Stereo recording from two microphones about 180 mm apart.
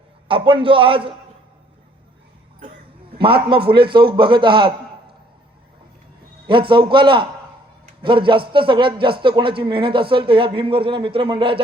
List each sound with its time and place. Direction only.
0.3 s a man's voice: 30° right (ahead or behind)
3.2 s a man's voice: 30° right (ahead or behind)
3.7 s a man's voice: 60° right (ahead or behind)
3.9 s a man's voice: 25° right (ahead or behind)
6.5 s a man's voice: 25° right (ahead or behind)